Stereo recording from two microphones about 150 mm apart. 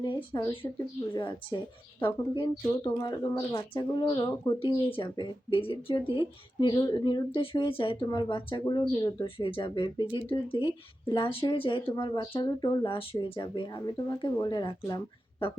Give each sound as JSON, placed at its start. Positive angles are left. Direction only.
{"t": 0.0, "sound": "speech", "side_deg": 30}